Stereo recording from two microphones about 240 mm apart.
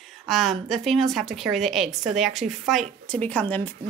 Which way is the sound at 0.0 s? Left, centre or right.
Centre.